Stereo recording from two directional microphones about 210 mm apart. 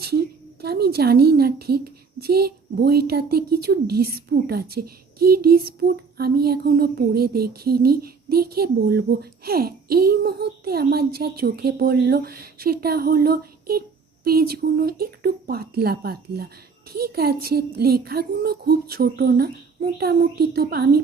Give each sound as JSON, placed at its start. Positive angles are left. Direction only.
{"t": 0.0, "sound": "a woman's voice", "side_deg": -50}